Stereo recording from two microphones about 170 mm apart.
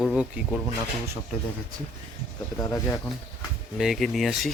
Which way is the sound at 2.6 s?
20° left (ahead or behind).